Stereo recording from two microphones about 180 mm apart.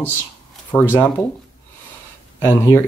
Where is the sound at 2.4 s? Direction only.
15° left (ahead or behind).